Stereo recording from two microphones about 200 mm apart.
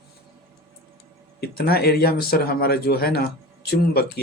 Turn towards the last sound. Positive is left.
turn(degrees=50)  # may be behind; listen again after turning